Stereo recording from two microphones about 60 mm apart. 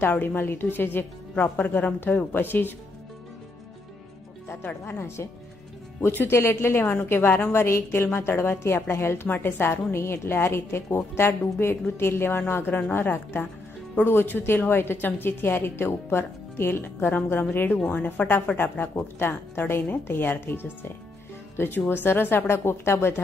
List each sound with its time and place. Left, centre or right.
0.0 s a woman's voice: left
2.1 s a woman's voice: left
4.6 s speech: left
5.9 s a woman's voice: left
7.6 s a woman's voice: left
17.7 s a woman's voice: left